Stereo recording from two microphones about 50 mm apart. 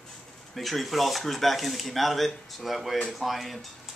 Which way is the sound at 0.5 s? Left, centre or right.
Centre.